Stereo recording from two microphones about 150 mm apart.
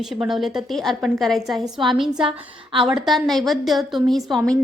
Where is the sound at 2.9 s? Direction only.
Centre (ahead or behind).